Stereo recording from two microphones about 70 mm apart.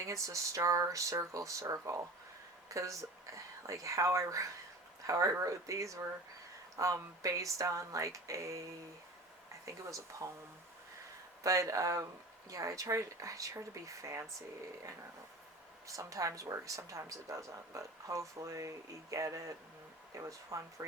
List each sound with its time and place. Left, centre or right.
0.0 s speech: right
9.6 s speech: right
11.4 s speech: right
15.9 s speech: right